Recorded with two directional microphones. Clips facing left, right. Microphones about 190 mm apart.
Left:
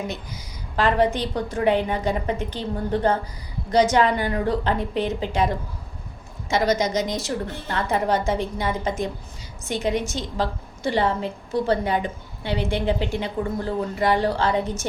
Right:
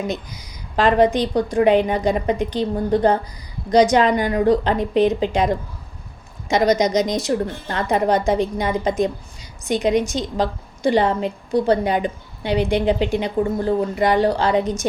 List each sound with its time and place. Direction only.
0.1 s a woman's voice: 15° right (ahead or behind)